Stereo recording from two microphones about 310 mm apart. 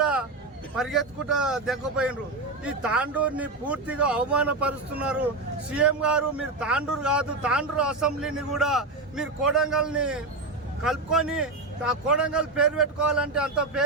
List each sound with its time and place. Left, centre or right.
0.0 s vehicle: centre
0.8 s a man's voice: centre